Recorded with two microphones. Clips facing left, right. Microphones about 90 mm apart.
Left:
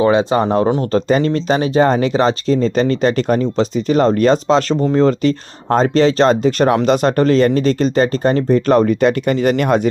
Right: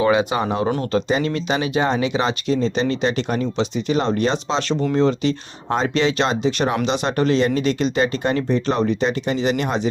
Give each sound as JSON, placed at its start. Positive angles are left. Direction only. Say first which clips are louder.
{"t": 0.0, "sound": "speech", "louder": "left 5 dB", "side_deg": 30}